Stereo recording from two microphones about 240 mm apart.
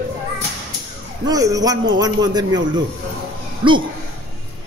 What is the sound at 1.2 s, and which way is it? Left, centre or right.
Speech, centre.